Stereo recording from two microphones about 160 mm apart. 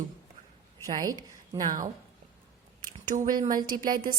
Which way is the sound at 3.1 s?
50° right (ahead or behind).